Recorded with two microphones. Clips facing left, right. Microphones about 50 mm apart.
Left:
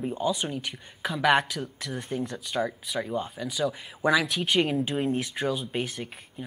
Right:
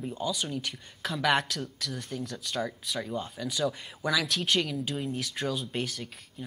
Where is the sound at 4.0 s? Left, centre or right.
Left.